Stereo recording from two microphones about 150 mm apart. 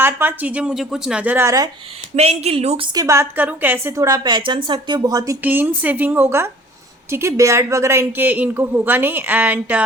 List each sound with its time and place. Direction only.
0.0 s speech: 15° right (ahead or behind)
2.1 s a woman's voice: 45° right (ahead or behind); by 5.4 s 25° right (ahead or behind)
5.4 s speech: 10° right (ahead or behind)